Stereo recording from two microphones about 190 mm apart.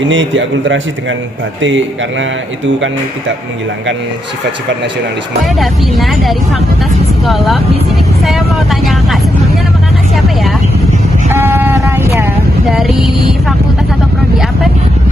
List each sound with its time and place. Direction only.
0.0 s speech: 85° right
5.5 s speech: centre (ahead or behind)
8.2 s vehicle: centre (ahead or behind)
11.3 s a sound: 10° right (ahead or behind)
12.6 s speech: centre (ahead or behind)